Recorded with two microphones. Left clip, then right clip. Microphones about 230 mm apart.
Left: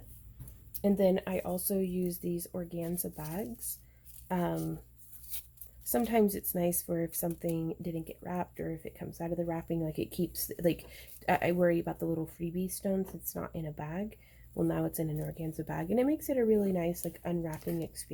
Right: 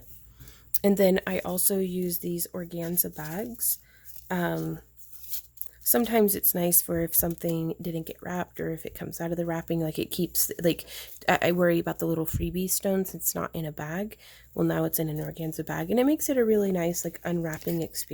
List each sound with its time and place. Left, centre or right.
0.7 s speech: right
5.8 s speech: right